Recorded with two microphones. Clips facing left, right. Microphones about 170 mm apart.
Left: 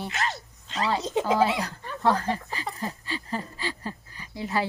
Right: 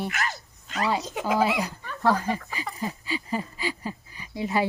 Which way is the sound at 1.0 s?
25° left (ahead or behind).